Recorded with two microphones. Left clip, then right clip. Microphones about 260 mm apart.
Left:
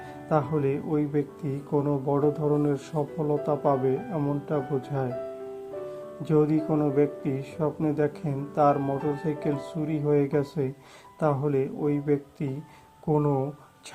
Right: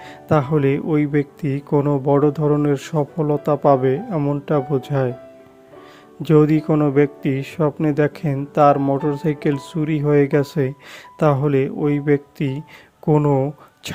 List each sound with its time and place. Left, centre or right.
0.3 s speech: right
6.2 s speech: right